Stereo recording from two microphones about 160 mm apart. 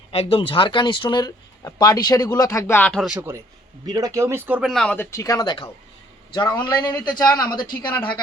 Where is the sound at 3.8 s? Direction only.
25° right (ahead or behind).